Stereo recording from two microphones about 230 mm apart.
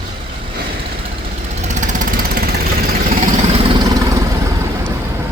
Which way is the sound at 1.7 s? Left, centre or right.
Right.